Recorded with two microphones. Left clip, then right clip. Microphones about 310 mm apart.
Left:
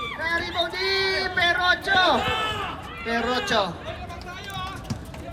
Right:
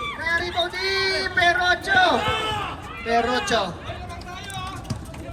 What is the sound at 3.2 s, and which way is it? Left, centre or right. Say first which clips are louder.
Speech: right 1 dB; centre.